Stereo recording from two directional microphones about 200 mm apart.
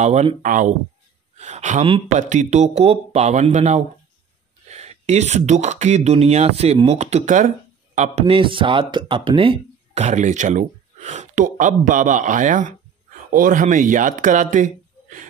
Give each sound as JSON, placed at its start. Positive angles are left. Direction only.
{"t": 0.0, "sound": "a man's voice", "side_deg": -35}